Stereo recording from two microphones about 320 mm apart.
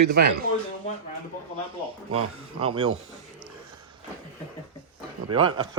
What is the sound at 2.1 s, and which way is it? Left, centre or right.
Speech, centre.